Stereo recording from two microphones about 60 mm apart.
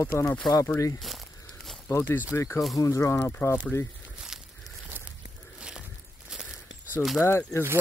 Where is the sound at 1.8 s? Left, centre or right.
Left.